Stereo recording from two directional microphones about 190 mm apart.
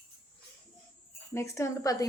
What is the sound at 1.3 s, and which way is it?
Speech, 15° left (ahead or behind).